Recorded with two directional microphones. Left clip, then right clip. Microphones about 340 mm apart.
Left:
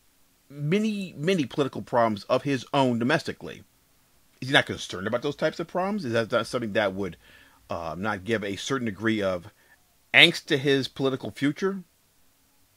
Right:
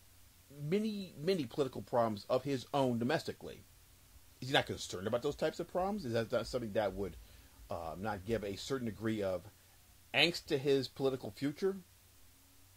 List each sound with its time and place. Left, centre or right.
0.7 s speech: left